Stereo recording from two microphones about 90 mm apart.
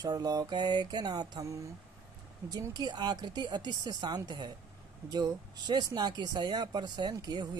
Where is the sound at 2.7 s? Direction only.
50° right (ahead or behind).